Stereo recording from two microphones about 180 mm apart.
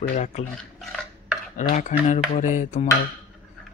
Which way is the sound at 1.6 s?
45° left (ahead or behind).